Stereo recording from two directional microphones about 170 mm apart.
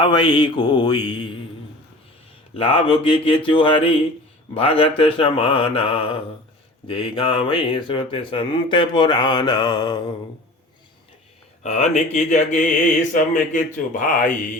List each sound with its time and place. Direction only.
0.0 s speech: 25° left (ahead or behind)
2.6 s speech: 30° left (ahead or behind)
11.6 s speech: 40° left (ahead or behind)